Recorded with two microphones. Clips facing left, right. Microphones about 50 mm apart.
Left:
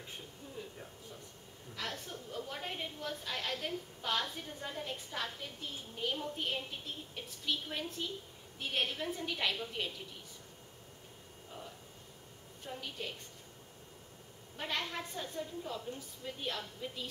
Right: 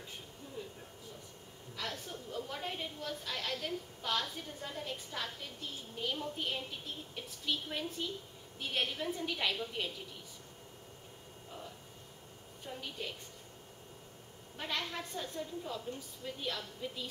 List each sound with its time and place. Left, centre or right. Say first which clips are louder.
1.8 s a woman's voice: even; centre
12.6 s a woman's voice: even; centre
14.6 s a woman's voice: left 1 dB; centre
15.9 s a woman's voice: right 1 dB; left
16.3 s a woman's voice: even; centre